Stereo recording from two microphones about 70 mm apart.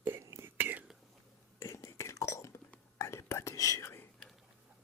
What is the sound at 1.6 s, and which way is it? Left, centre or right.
Whispering, left.